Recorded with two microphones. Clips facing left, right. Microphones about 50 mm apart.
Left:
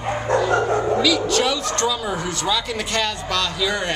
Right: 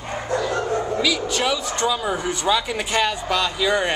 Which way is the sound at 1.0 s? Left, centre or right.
Centre.